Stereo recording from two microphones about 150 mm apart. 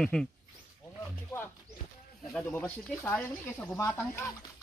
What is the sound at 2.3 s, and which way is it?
Speech, 5° left (ahead or behind).